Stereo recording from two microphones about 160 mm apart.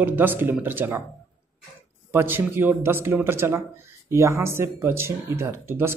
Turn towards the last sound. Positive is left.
turn(degrees=-15)  # may be behind; listen again after turning